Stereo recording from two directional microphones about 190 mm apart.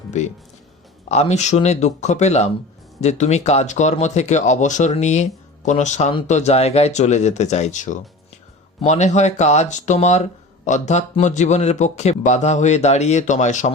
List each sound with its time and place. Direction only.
0.1 s speech: 35° left (ahead or behind)